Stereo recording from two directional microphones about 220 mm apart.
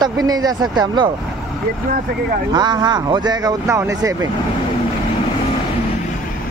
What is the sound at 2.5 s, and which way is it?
Speech, 20° right (ahead or behind).